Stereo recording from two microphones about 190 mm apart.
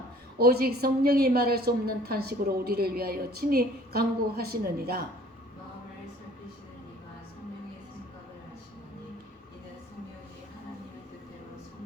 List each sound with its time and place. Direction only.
0.3 s a woman's voice: 55° right (ahead or behind)